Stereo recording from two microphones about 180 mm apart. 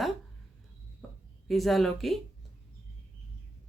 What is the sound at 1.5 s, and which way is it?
Speech, centre (ahead or behind).